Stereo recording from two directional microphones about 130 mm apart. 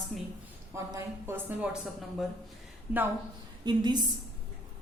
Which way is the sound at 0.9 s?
20° right (ahead or behind).